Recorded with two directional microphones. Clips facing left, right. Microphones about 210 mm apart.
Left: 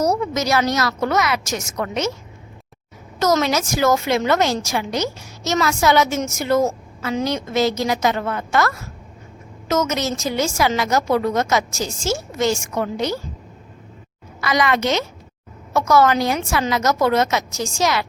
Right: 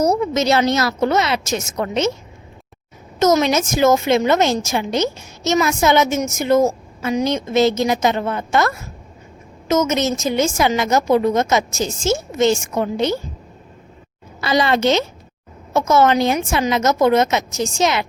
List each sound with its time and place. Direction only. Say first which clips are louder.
0.0 s a woman's voice: right 3 dB; 20° right (ahead or behind)
3.2 s a woman's voice: right 3 dB; 20° right (ahead or behind)
14.4 s a woman's voice: right 3 dB; 30° right (ahead or behind)